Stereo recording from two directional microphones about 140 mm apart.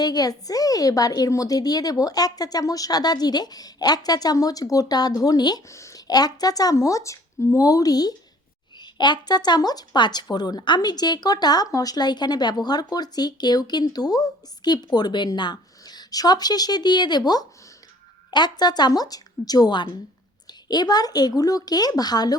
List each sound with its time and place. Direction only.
0.0 s speech: 25° left (ahead or behind)